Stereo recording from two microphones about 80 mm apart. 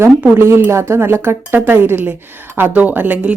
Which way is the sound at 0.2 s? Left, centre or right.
Right.